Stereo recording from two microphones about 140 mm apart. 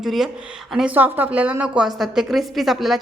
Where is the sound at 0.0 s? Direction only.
Centre (ahead or behind).